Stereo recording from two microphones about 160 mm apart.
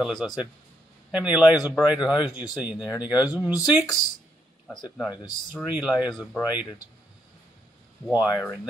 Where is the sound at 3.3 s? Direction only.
10° right (ahead or behind).